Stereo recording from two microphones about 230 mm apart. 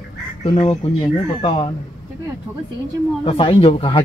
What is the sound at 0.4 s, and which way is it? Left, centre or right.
Speech, left.